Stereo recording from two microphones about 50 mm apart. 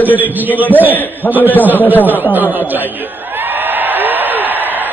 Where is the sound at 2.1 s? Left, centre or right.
Right.